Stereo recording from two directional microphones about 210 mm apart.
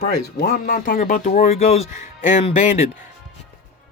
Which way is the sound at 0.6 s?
35° left (ahead or behind).